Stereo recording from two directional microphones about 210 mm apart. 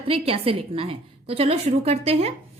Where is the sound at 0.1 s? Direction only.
25° right (ahead or behind).